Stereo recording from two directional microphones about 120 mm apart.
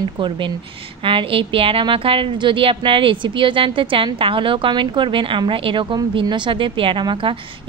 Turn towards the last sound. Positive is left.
turn(degrees=-40)  # may be behind; listen again after turning